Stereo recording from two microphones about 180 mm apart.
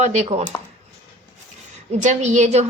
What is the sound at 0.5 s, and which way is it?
Speech, 10° left (ahead or behind).